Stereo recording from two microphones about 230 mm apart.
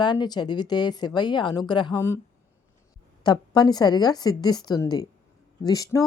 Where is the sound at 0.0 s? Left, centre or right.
Centre.